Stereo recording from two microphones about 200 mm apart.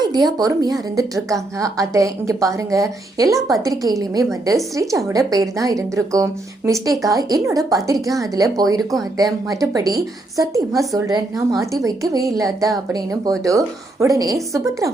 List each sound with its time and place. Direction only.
0.0 s a woman's voice: 20° right (ahead or behind)